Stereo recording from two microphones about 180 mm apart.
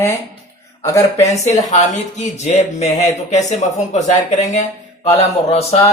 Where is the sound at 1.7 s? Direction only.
40° left (ahead or behind).